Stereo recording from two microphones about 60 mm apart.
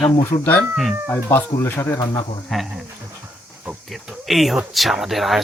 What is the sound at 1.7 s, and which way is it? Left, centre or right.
Speech, left.